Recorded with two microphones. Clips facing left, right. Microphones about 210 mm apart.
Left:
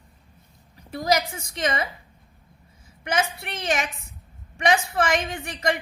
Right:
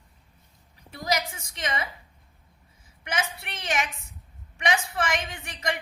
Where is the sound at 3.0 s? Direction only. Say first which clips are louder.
Left 6 dB; 40° left (ahead or behind).